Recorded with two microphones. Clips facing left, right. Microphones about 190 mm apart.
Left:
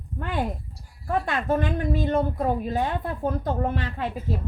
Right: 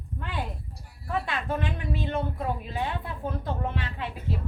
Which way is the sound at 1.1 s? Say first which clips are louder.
Left 6 dB; 45° left (ahead or behind).